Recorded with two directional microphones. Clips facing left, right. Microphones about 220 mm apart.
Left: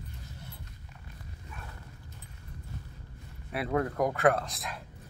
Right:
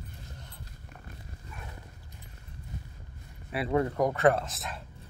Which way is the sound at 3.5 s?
Centre (ahead or behind).